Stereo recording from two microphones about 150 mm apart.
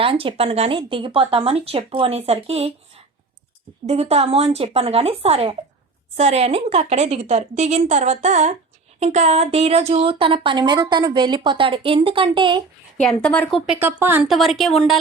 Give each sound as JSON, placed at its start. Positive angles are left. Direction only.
{"t": 0.0, "sound": "a woman's voice", "side_deg": -40}
{"t": 3.8, "sound": "a woman's voice", "side_deg": -45}
{"t": 13.0, "sound": "speech", "side_deg": 5}
{"t": 13.7, "sound": "speech", "side_deg": -15}
{"t": 14.3, "sound": "speech", "side_deg": 0}